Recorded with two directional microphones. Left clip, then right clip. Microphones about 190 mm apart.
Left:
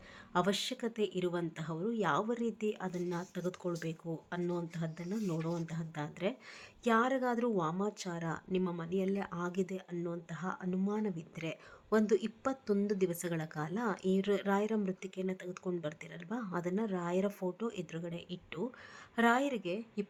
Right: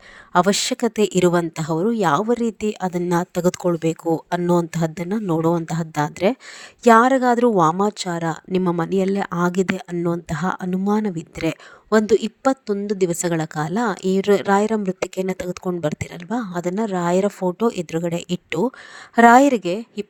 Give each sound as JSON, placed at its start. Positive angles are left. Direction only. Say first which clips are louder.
{"t": 0.3, "sound": "speech", "louder": "right 16 dB", "side_deg": -45}